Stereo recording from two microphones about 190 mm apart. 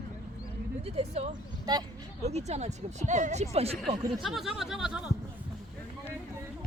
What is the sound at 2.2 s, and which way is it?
Speech, 35° right (ahead or behind).